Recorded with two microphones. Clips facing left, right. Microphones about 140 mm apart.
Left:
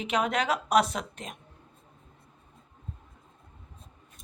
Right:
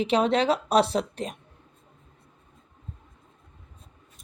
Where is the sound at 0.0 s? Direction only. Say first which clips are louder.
Right 6 dB; 30° right (ahead or behind).